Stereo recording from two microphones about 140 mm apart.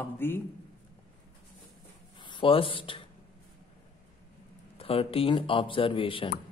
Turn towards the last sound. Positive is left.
turn(degrees=40)  # may be behind; listen again after turning